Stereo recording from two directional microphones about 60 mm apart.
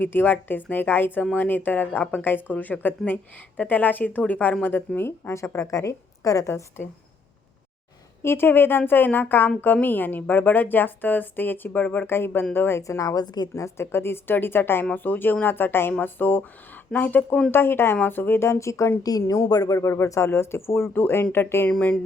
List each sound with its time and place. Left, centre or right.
0.0 s a woman's voice: left
5.3 s a woman's voice: left
6.8 s a woman's voice: left
8.2 s a woman's voice: left
13.0 s a woman's voice: left
13.5 s a woman's voice: left
18.4 s a woman's voice: left
19.5 s speech: left
19.9 s a woman's voice: left
21.7 s speech: left